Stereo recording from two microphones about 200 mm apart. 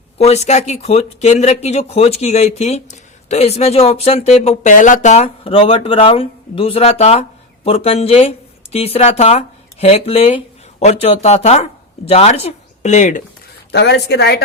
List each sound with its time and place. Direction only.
0.2 s speech: 35° left (ahead or behind)
13.7 s a woman's voice: 55° left (ahead or behind)